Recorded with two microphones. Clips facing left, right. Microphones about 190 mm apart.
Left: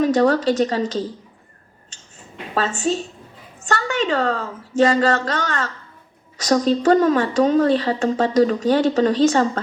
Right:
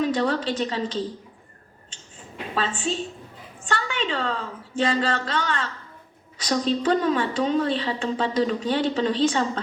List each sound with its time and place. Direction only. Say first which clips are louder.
0.0 s a woman's voice: left 7 dB; 45° left (ahead or behind)
2.6 s a woman's voice: left 5 dB; 45° left (ahead or behind)